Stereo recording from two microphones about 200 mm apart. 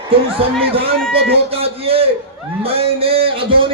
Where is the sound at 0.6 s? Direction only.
30° right (ahead or behind).